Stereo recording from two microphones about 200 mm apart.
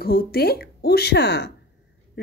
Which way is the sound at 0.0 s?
50° left (ahead or behind).